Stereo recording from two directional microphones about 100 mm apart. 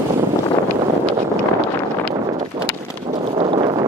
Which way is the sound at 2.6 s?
60° right (ahead or behind).